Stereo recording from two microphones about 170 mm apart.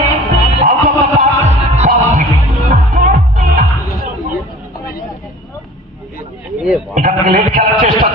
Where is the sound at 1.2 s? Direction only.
45° right (ahead or behind).